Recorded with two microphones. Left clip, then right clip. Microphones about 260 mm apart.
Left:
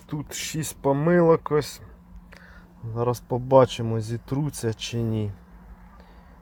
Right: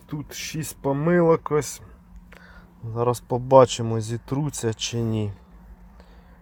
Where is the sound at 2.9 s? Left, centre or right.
Centre.